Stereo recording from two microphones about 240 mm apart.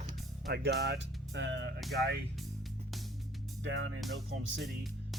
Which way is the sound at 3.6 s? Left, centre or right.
Right.